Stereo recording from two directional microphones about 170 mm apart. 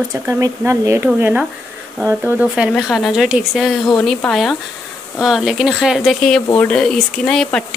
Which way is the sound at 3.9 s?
10° left (ahead or behind).